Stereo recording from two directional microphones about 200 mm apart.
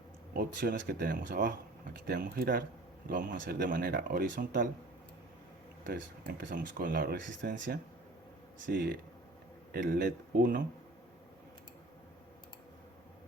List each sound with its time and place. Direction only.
0.3 s speech: 45° right (ahead or behind)
5.8 s speech: 45° right (ahead or behind)
8.7 s speech: 55° right (ahead or behind)